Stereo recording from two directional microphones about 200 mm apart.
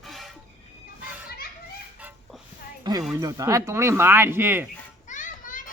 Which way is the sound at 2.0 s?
5° right (ahead or behind).